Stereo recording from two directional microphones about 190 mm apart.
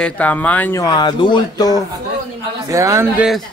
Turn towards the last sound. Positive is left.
turn(degrees=-15)  # may be behind; listen again after turning